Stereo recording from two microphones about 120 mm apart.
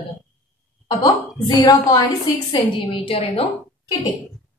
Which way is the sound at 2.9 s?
50° left (ahead or behind).